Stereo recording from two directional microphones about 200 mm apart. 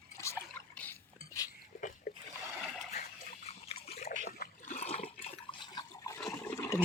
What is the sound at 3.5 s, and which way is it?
Water, 30° left (ahead or behind).